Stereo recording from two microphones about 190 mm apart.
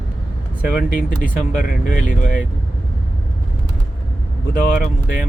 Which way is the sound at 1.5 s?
45° left (ahead or behind).